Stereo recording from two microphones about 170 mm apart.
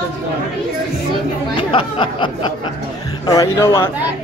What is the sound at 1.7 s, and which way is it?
Speech, 30° left (ahead or behind).